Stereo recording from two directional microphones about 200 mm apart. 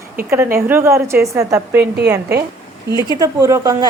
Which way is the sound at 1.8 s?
55° right (ahead or behind).